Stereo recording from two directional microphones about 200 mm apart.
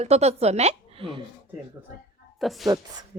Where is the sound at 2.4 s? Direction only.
Centre (ahead or behind).